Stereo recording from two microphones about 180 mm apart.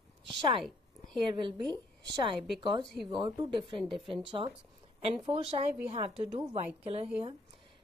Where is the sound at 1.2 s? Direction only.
25° right (ahead or behind).